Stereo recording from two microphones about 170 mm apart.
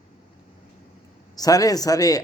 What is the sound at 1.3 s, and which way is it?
Speech, 20° left (ahead or behind).